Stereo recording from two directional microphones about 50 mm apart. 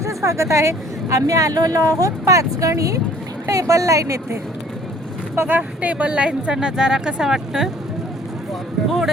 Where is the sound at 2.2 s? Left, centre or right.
Right.